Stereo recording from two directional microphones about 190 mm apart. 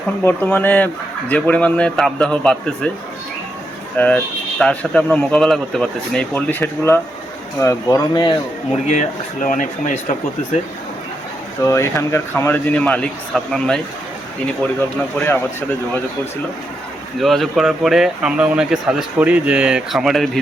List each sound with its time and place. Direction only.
0.3 s a man's voice: 10° left (ahead or behind)
3.9 s a man's voice: 5° left (ahead or behind); by 8.4 s 25° left (ahead or behind)
8.9 s speech: 40° left (ahead or behind)
11.6 s a man's voice: 15° left (ahead or behind)
17.2 s speech: centre (ahead or behind)